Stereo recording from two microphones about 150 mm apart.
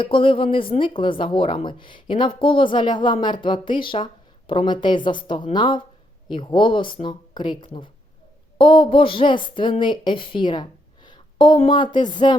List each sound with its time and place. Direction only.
0.0 s a woman's voice: 35° left (ahead or behind)